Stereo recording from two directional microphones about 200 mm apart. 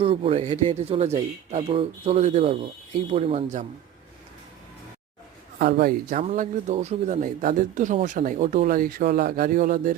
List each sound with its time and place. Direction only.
0.0 s speech: 30° right (ahead or behind)
5.5 s speech: 50° right (ahead or behind)